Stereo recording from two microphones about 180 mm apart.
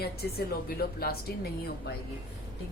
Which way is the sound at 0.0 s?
60° left (ahead or behind).